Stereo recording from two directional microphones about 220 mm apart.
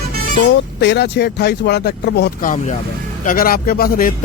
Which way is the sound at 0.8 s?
50° left (ahead or behind).